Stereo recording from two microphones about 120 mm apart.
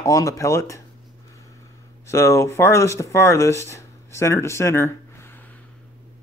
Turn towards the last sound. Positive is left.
turn(degrees=15)  # may be behind; listen again after turning